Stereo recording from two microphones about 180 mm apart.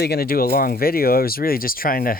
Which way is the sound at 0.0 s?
60° left (ahead or behind).